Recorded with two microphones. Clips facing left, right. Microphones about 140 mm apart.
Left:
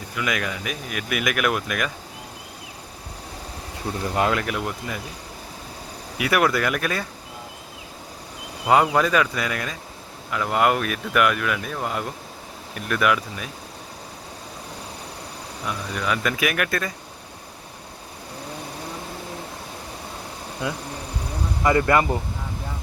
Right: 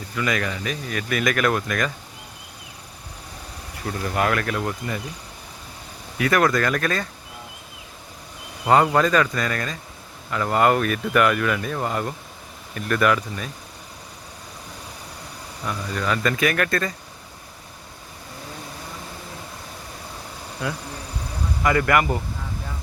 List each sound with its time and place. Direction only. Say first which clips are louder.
0.2 s speech: right 2 dB; 5° left (ahead or behind)
3.8 s speech: even; 20° left (ahead or behind)
6.1 s speech: right 1 dB; 10° left (ahead or behind)
8.6 s speech: right 1 dB; 5° left (ahead or behind)
15.6 s speech: right 1 dB; centre (ahead or behind)
20.6 s speech: even; 20° left (ahead or behind)